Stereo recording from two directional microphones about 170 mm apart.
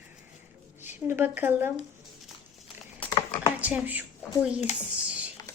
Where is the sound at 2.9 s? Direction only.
25° left (ahead or behind).